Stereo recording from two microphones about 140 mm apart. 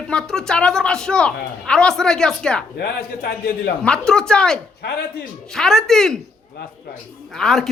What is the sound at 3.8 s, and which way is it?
A woman's voice, 5° left (ahead or behind).